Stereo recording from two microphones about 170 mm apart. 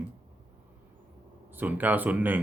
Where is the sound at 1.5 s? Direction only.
10° right (ahead or behind).